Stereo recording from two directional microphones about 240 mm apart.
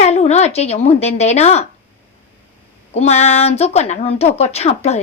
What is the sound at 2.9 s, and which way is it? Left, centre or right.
A woman's voice, left.